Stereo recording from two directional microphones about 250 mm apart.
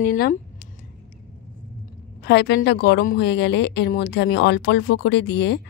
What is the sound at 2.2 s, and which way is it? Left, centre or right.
A woman's voice, left.